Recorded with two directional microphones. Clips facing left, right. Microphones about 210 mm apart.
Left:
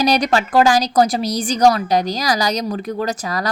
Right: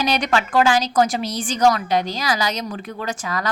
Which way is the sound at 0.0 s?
35° left (ahead or behind).